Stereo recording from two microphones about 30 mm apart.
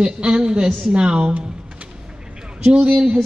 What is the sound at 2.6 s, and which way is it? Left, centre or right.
Speech, right.